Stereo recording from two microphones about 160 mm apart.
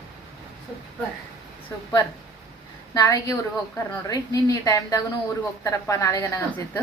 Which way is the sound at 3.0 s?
20° left (ahead or behind).